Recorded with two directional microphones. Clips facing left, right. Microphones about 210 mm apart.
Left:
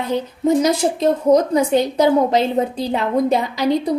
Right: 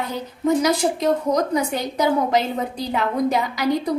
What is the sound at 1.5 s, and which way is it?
A woman's voice, 25° left (ahead or behind).